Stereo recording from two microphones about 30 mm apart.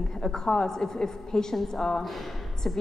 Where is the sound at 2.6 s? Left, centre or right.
Left.